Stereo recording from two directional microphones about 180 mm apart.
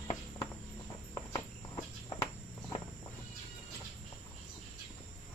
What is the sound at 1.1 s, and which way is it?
Insect, 25° left (ahead or behind).